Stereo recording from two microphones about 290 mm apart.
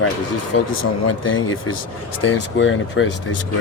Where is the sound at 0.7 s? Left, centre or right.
Left.